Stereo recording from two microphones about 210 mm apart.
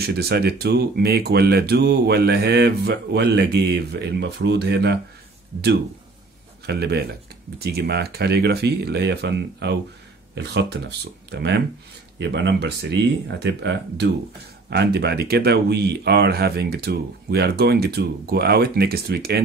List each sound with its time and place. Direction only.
0.0 s speech: 50° right (ahead or behind)
6.6 s speech: 50° right (ahead or behind)